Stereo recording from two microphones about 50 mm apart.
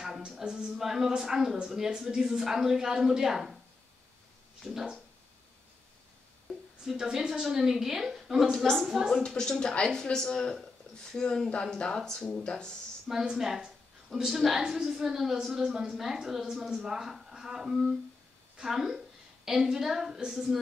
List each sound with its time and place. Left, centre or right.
0.3 s a woman's voice: centre
6.9 s a woman's voice: centre
8.6 s a woman's voice: centre
9.1 s speech: centre
13.2 s a woman's voice: centre